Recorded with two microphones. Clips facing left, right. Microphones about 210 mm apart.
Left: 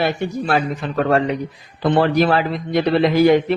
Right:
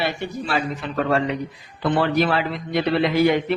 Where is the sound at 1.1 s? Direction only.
55° left (ahead or behind).